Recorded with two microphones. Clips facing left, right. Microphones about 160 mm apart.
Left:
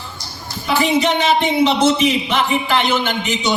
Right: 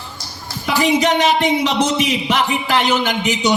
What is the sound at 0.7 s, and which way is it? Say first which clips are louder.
A man's voice: right 1 dB; 40° right (ahead or behind).